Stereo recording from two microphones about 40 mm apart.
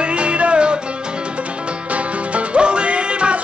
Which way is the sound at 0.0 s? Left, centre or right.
Right.